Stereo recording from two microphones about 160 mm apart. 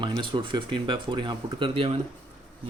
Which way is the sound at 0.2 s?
30° right (ahead or behind).